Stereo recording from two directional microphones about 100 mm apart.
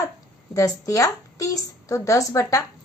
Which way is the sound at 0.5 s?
35° left (ahead or behind).